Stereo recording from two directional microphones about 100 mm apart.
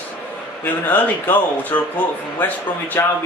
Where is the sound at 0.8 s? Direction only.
15° left (ahead or behind).